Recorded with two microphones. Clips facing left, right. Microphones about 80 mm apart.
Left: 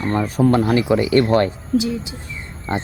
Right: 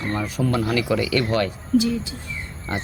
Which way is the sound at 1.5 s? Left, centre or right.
Centre.